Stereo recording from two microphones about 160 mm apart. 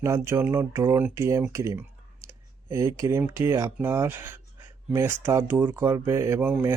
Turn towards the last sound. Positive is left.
turn(degrees=-10)  # may be behind; listen again after turning